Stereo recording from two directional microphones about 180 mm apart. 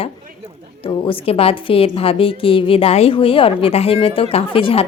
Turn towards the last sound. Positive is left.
turn(degrees=30)  # may be behind; listen again after turning